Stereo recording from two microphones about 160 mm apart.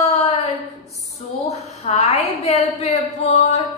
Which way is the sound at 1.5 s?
40° left (ahead or behind).